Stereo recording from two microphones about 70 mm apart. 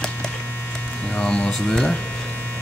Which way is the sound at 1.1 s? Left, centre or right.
Centre.